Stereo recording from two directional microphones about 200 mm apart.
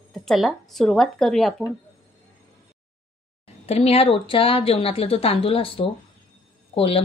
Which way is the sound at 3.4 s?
30° left (ahead or behind).